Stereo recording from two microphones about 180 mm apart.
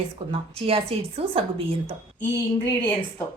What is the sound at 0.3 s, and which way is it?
A woman's voice, 30° right (ahead or behind).